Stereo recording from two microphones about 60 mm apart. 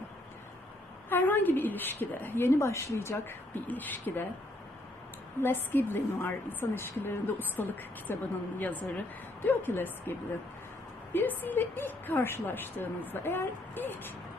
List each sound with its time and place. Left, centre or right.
1.1 s a woman's voice: left
3.2 s a woman's voice: left
5.4 s a woman's voice: left